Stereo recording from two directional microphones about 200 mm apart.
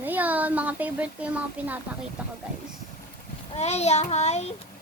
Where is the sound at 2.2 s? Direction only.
5° right (ahead or behind).